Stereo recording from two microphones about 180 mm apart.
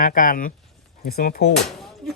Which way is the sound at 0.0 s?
50° left (ahead or behind).